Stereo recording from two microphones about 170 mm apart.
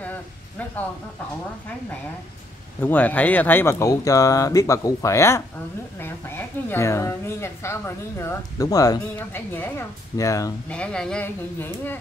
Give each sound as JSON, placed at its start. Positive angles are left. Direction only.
{"t": 2.8, "sound": "a woman's voice", "side_deg": 10}
{"t": 10.7, "sound": "a woman's voice", "side_deg": 5}